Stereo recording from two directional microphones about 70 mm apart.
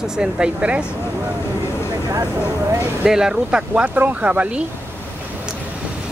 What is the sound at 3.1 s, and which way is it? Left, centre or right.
Speech, centre.